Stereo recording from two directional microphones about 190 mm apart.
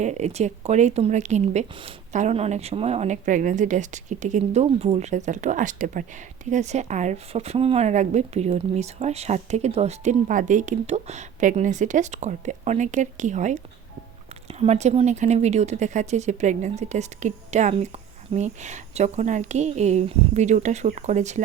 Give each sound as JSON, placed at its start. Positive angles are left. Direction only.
{"t": 0.0, "sound": "speech", "side_deg": -35}